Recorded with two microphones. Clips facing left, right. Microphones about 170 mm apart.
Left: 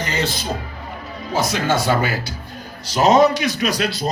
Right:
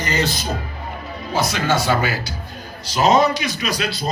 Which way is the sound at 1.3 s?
45° left (ahead or behind).